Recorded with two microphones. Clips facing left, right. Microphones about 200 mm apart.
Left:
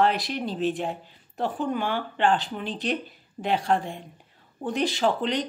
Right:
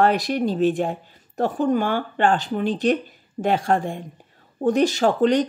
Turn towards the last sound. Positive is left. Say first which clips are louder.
# right 7 dB
turn(degrees=-45)  # may be behind; listen again after turning